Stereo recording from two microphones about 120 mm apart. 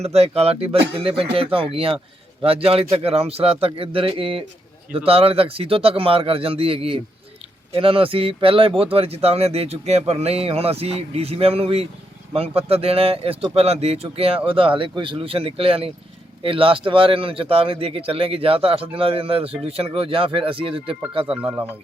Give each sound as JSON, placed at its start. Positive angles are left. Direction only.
{"t": 0.0, "sound": "speech", "side_deg": -60}